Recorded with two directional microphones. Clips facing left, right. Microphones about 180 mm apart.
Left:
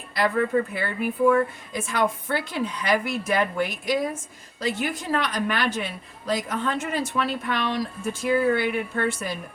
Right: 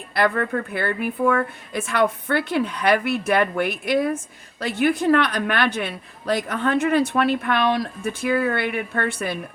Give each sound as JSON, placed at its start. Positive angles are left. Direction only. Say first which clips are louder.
{"t": 0.1, "sound": "speech", "louder": "right 1 dB", "side_deg": -60}